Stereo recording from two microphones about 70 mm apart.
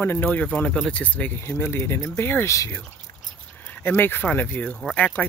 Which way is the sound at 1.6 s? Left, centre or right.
Left.